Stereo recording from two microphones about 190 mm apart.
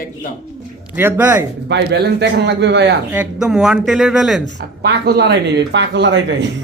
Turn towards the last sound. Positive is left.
turn(degrees=-65)  # may be behind; listen again after turning